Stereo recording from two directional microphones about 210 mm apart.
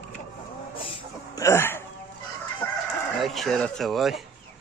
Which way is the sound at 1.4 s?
15° left (ahead or behind).